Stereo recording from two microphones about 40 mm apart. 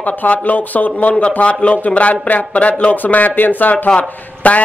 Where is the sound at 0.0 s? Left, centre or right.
Left.